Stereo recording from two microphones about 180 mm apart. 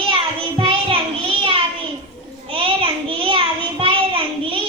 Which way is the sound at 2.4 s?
30° right (ahead or behind).